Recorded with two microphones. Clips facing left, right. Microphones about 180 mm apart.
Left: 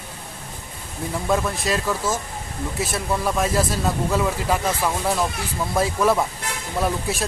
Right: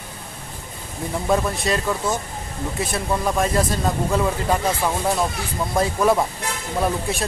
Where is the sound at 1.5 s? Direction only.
Centre (ahead or behind).